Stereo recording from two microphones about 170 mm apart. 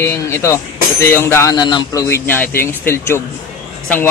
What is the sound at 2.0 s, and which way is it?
Speech, 15° left (ahead or behind).